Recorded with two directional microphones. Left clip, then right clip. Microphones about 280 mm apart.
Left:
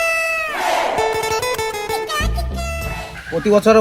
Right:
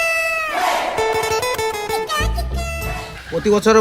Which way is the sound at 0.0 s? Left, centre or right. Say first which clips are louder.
Even; centre.